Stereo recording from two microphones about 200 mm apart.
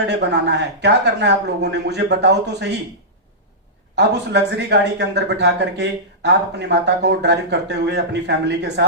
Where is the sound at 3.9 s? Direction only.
60° right (ahead or behind).